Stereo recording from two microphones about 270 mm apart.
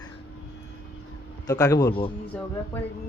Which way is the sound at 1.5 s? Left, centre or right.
Centre.